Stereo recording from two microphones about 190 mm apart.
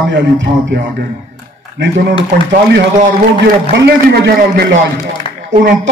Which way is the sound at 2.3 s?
50° right (ahead or behind).